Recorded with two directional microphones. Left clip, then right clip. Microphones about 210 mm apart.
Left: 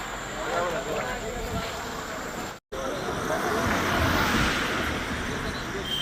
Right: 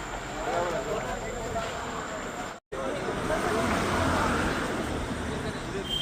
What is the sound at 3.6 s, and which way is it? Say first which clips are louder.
Vehicle: left 2 dB; 50° right (ahead or behind).